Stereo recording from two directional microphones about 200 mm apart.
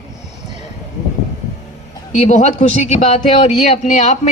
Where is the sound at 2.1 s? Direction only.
35° left (ahead or behind).